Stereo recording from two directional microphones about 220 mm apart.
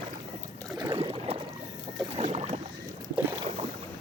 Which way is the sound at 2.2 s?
30° right (ahead or behind).